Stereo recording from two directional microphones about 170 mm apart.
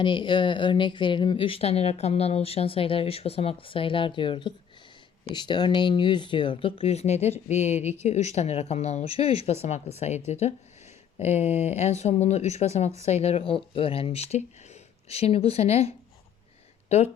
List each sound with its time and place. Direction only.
0.0 s speech: 30° left (ahead or behind)